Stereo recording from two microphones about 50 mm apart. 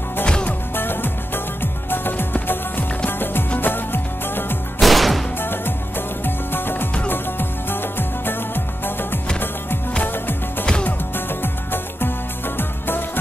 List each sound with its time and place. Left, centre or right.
0.2 s music: left
0.7 s music: left
4.7 s music: centre
5.4 s music: left
11.1 s music: left